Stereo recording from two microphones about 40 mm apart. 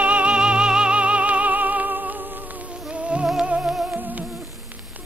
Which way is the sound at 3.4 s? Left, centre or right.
Right.